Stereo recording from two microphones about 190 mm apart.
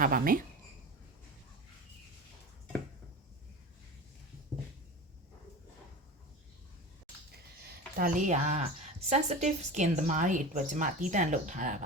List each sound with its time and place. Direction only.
0.0 s speech: 45° right (ahead or behind)
7.6 s speech: 55° right (ahead or behind)